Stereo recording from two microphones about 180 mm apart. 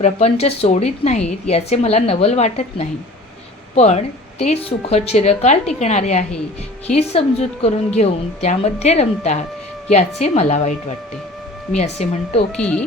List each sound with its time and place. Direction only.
0.0 s speech: 35° left (ahead or behind)
11.9 s speech: 40° left (ahead or behind)
12.5 s speech: 5° left (ahead or behind)